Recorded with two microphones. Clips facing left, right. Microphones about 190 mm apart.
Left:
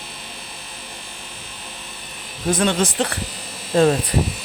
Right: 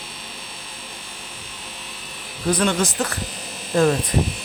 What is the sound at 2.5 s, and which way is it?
Speech, 25° left (ahead or behind).